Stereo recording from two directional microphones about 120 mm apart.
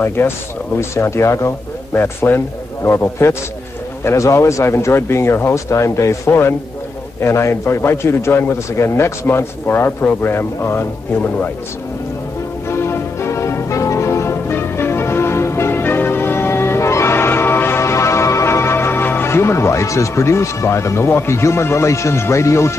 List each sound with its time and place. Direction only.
0.0 s a man's voice: 20° left (ahead or behind)
12.6 s music: 20° left (ahead or behind)